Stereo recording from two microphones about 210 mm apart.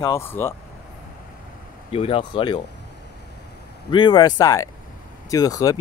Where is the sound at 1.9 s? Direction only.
25° left (ahead or behind).